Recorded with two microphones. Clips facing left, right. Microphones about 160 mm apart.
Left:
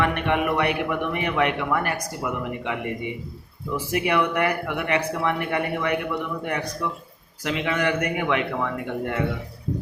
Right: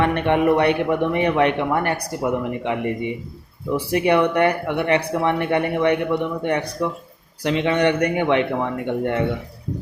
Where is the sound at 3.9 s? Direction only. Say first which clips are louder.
Right 5 dB; 30° right (ahead or behind).